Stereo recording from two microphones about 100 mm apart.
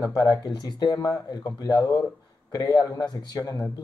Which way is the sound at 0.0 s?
45° left (ahead or behind).